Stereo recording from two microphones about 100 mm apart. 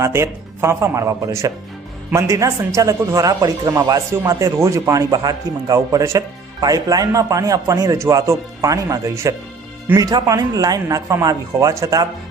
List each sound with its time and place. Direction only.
0.0 s speech: 30° right (ahead or behind)